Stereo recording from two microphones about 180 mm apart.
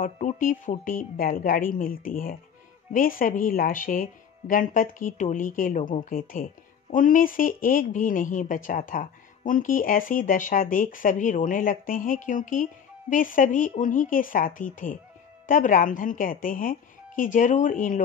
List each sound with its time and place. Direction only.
0.0 s speech: 45° left (ahead or behind)